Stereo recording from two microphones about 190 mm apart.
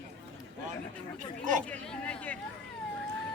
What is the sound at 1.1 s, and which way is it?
Speech, 40° right (ahead or behind).